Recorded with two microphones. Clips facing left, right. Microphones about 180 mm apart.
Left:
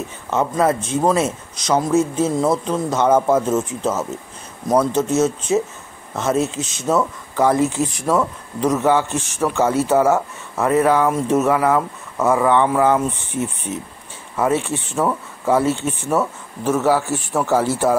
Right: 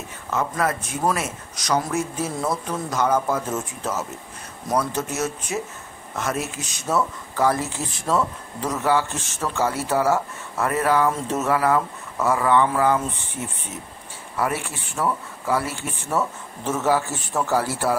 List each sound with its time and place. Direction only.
0.3 s speech: 25° left (ahead or behind)